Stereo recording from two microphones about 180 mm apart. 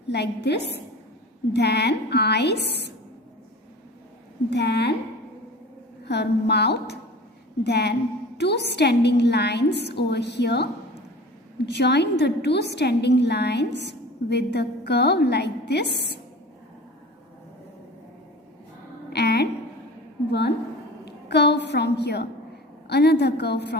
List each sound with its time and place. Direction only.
0.1 s a woman's voice: 70° left (ahead or behind)
4.4 s a woman's voice: 70° left (ahead or behind)
6.1 s a woman's voice: 65° left (ahead or behind)
19.1 s a sound: 65° left (ahead or behind)
21.0 s a woman's voice: 65° left (ahead or behind)